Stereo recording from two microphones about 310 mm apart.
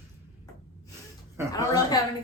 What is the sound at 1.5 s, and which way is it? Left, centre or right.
Speech, centre.